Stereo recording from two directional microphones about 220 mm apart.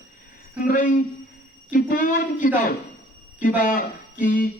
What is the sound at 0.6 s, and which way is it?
Speech, 35° left (ahead or behind).